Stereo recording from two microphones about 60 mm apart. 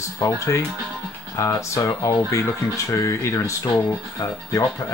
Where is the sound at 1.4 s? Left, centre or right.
Left.